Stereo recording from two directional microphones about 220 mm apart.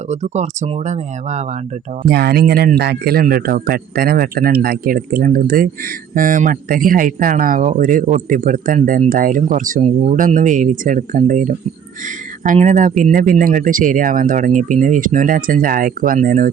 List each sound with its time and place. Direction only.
0.1 s a man's voice: 30° right (ahead or behind)
2.0 s a man's voice: 45° right (ahead or behind)